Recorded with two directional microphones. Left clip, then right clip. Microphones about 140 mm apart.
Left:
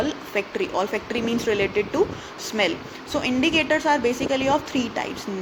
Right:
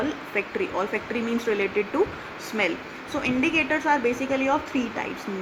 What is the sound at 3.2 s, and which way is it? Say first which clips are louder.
A woman's voice: left 2 dB; 45° left (ahead or behind).